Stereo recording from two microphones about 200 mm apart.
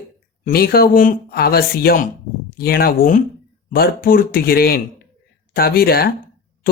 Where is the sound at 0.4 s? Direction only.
50° left (ahead or behind).